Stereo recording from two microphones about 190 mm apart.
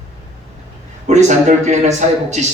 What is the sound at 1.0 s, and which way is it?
A man's voice, 35° right (ahead or behind).